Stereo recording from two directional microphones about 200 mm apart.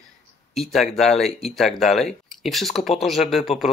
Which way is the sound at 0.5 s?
Centre (ahead or behind).